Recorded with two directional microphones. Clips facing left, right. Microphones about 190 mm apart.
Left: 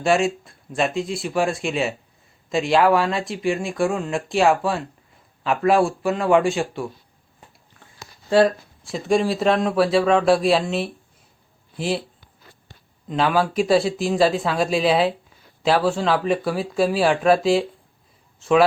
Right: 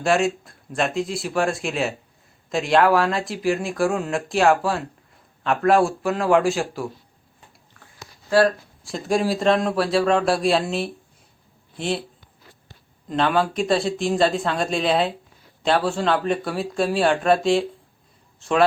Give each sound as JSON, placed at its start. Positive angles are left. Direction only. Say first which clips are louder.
{"t": 0.0, "sound": "speech", "louder": "left 1 dB", "side_deg": 0}
{"t": 8.3, "sound": "speech", "louder": "left 1 dB", "side_deg": 20}
{"t": 8.8, "sound": "speech", "louder": "left 2 dB", "side_deg": 0}
{"t": 13.1, "sound": "a man's voice", "louder": "even", "side_deg": 5}